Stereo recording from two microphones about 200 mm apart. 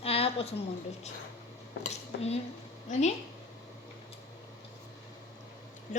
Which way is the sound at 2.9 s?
35° left (ahead or behind).